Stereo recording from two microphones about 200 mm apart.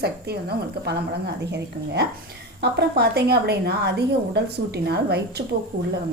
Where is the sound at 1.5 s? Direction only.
55° right (ahead or behind).